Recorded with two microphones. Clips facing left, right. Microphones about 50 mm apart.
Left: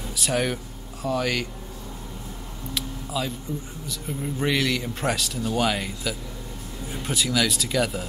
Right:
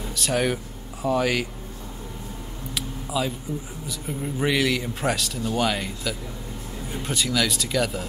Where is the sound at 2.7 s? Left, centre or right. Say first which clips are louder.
Right 1 dB; centre.